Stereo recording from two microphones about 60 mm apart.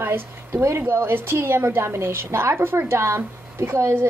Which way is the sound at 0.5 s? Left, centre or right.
Right.